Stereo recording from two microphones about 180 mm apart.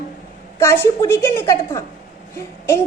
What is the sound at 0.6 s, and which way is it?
A woman's voice, 15° left (ahead or behind).